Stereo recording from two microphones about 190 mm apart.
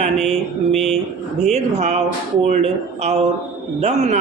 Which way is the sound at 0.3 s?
35° right (ahead or behind).